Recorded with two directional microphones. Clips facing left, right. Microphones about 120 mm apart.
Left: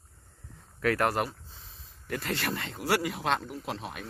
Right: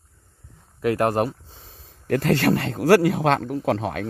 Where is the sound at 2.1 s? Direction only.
65° right (ahead or behind).